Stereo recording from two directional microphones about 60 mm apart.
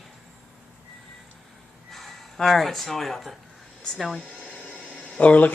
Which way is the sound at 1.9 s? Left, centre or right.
Centre.